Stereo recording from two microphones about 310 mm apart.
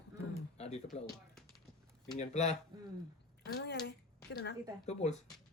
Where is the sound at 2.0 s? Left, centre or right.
Left.